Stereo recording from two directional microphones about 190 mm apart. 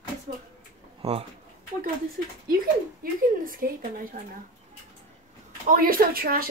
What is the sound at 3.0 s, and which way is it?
A woman's voice, 50° right (ahead or behind).